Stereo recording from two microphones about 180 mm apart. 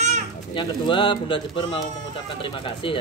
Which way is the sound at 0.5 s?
30° left (ahead or behind).